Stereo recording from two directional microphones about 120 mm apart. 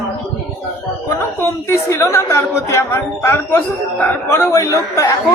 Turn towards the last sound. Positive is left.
turn(degrees=25)  # may be behind; listen again after turning